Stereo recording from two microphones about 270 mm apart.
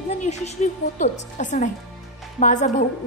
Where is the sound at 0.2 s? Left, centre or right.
Left.